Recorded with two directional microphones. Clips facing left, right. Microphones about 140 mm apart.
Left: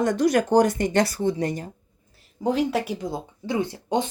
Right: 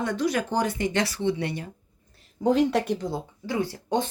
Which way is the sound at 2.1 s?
Centre (ahead or behind).